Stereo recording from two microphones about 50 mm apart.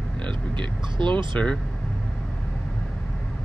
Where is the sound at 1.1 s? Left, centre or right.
Left.